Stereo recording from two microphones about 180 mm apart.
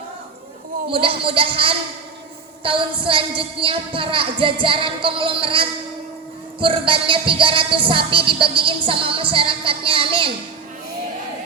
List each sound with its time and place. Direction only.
0.9 s music: 30° right (ahead or behind)